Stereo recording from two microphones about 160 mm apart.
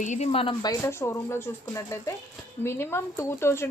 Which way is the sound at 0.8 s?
15° left (ahead or behind).